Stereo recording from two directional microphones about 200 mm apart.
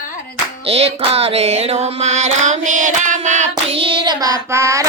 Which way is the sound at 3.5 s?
25° right (ahead or behind).